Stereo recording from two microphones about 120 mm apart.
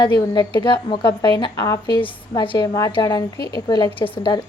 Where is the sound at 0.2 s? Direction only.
40° left (ahead or behind).